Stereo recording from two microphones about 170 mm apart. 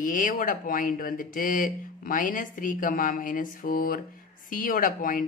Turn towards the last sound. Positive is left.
turn(degrees=55)  # may be behind; listen again after turning